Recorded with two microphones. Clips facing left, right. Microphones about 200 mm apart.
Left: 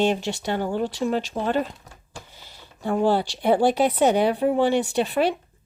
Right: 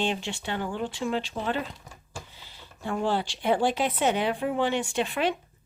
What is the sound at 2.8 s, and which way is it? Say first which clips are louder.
Speech: left 6 dB; 40° left (ahead or behind).